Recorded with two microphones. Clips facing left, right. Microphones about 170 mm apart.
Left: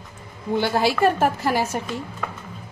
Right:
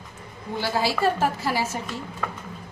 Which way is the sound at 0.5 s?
60° left (ahead or behind).